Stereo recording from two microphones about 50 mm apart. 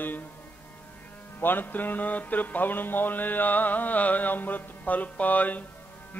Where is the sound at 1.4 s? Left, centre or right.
Left.